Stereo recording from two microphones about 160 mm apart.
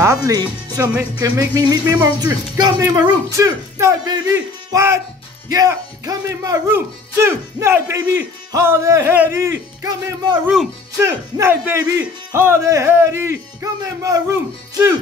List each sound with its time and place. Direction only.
0.0 s speech: 20° right (ahead or behind)